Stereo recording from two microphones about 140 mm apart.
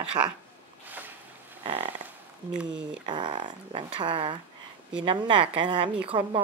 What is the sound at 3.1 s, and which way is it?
Speech, 35° right (ahead or behind).